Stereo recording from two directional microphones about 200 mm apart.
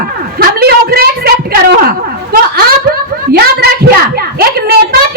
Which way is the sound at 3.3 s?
50° right (ahead or behind).